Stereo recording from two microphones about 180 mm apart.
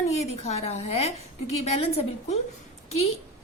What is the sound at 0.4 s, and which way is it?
A woman's voice, 35° left (ahead or behind).